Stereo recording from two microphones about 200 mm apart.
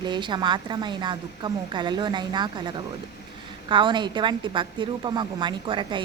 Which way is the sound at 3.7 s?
25° right (ahead or behind).